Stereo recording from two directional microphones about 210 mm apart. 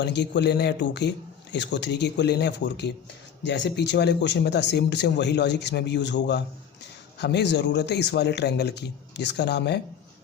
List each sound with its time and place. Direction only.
0.0 s speech: 55° left (ahead or behind)